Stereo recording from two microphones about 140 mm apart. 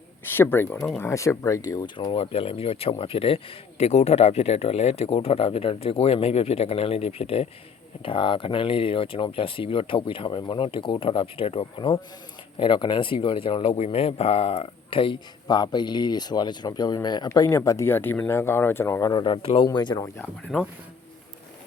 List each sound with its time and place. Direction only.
0.3 s speech: 15° left (ahead or behind)
2.1 s speech: 40° left (ahead or behind); by 19.1 s 20° left (ahead or behind)
19.1 s speech: 35° left (ahead or behind)
20.5 s speech: 10° left (ahead or behind)